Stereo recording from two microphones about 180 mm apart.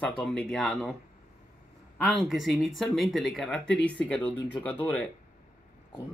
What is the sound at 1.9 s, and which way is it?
Speech, centre (ahead or behind).